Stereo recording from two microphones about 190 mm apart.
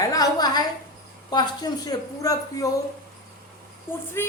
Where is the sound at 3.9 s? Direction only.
10° left (ahead or behind).